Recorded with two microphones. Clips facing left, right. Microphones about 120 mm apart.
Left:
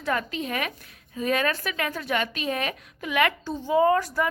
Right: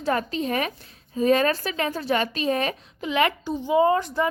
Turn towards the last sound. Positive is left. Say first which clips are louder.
# right 1 dB
turn(degrees=-20)  # may be behind; listen again after turning